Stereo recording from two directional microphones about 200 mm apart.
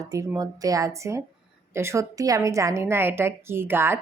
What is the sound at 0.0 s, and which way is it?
A woman's voice, 15° right (ahead or behind).